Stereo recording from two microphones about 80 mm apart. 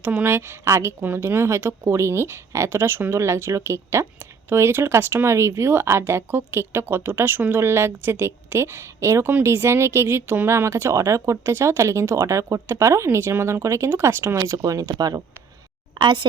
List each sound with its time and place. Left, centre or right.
0.0 s speech: right
14.5 s speech: right
16.0 s speech: right